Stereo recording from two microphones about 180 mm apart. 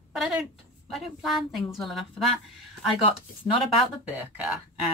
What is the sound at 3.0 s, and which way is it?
Speech, 30° left (ahead or behind).